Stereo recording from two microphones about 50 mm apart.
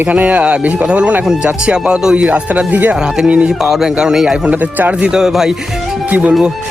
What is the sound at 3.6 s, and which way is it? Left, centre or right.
Speech, centre.